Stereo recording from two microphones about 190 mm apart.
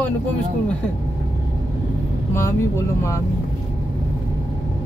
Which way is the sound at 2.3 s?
15° left (ahead or behind).